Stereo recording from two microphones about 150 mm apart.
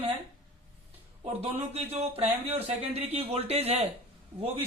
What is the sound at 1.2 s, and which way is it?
Speech, 40° right (ahead or behind).